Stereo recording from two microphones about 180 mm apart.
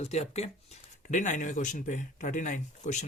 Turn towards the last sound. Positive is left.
turn(degrees=45)  # may be behind; listen again after turning